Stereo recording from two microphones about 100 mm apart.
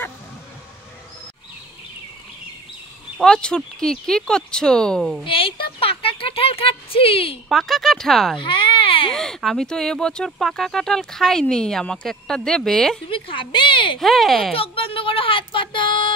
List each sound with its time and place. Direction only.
3.2 s speech: 10° left (ahead or behind)
5.2 s speech: 60° left (ahead or behind)
7.4 s speech: centre (ahead or behind)
8.4 s baby cry: 55° left (ahead or behind)
9.1 s speech: 5° left (ahead or behind)
13.1 s speech: 55° left (ahead or behind)
13.9 s speech: centre (ahead or behind)
14.5 s speech: 70° left (ahead or behind); by 16.1 s 55° left (ahead or behind)